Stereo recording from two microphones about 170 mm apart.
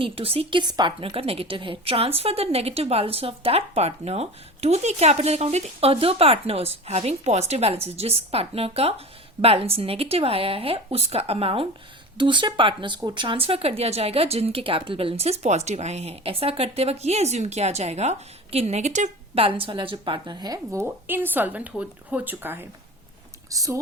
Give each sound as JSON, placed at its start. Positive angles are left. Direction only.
{"t": 0.0, "sound": "speech", "side_deg": -35}